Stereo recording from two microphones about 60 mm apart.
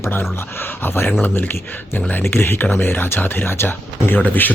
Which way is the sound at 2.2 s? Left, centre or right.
Left.